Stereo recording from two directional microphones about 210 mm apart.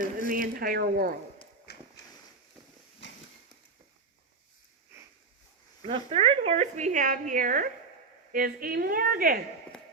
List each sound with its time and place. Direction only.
0.0 s a woman's voice: 45° right (ahead or behind)
1.7 s walk: 50° left (ahead or behind)
5.8 s a woman's voice: 25° right (ahead or behind); by 9.4 s 45° right (ahead or behind)